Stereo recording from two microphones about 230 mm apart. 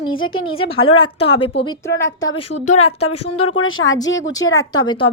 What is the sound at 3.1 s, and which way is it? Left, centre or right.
Speech, left.